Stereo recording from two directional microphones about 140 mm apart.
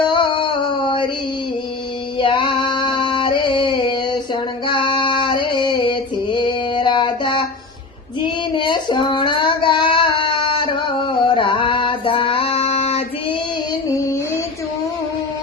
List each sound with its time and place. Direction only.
0.1 s a sound: 35° left (ahead or behind)
2.1 s female singing: 40° left (ahead or behind)
8.5 s child singing: 35° left (ahead or behind)
13.8 s music: 20° left (ahead or behind)